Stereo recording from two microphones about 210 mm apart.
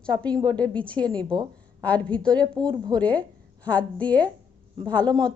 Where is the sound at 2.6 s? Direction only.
20° right (ahead or behind).